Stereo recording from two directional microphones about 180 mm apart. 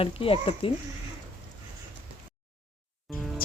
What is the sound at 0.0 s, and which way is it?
Speech, 30° left (ahead or behind).